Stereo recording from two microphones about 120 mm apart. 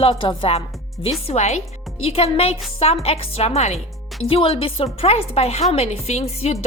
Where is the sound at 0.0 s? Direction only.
45° left (ahead or behind).